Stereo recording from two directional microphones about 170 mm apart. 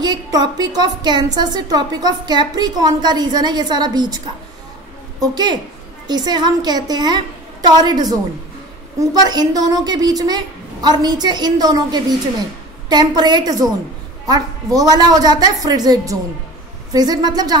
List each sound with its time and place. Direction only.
0.0 s a woman's voice: 25° right (ahead or behind)
5.2 s a woman's voice: 25° right (ahead or behind)
9.2 s a woman's voice: 25° right (ahead or behind)